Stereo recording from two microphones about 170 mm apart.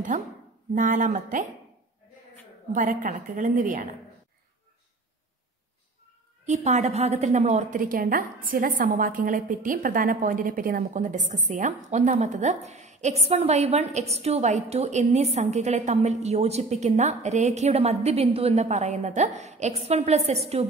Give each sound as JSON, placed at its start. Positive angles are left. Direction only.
{"t": 0.1, "sound": "a woman's voice", "side_deg": -50}
{"t": 2.7, "sound": "a woman's voice", "side_deg": -50}
{"t": 6.4, "sound": "a woman's voice", "side_deg": -45}